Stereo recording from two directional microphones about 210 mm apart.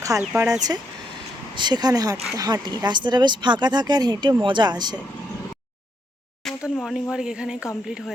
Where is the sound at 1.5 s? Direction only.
20° right (ahead or behind).